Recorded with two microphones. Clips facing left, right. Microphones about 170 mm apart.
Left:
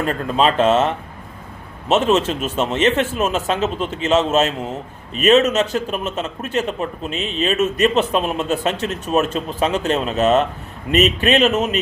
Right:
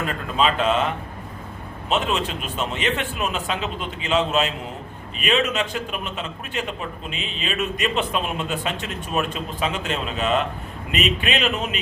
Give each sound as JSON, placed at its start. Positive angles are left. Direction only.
{"t": 0.3, "sound": "a man's voice", "side_deg": 40}
{"t": 1.9, "sound": "a man's voice", "side_deg": 45}